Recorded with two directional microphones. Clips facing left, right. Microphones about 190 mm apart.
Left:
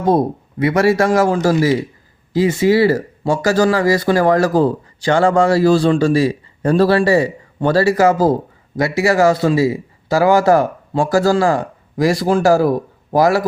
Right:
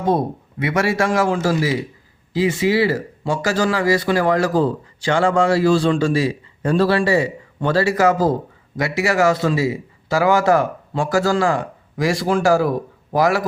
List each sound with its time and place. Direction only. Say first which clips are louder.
0.0 s speech: left 4 dB; 35° left (ahead or behind)